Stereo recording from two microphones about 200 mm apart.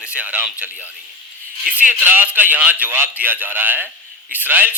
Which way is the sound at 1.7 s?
10° right (ahead or behind).